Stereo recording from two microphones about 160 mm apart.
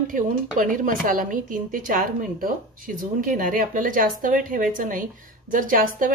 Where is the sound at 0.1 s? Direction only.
55° right (ahead or behind).